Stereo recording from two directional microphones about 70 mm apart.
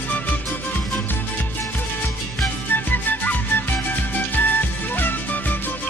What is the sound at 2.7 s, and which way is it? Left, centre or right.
Music, left.